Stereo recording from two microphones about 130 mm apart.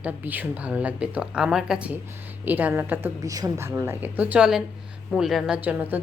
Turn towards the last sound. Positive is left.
turn(degrees=-15)  # may be behind; listen again after turning